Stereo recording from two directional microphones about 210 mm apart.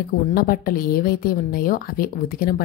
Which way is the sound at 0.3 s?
45° left (ahead or behind).